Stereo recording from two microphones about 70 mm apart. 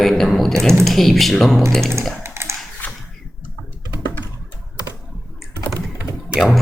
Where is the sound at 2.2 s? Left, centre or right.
Right.